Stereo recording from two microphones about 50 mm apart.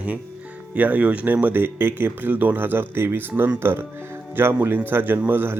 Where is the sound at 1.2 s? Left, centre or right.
Right.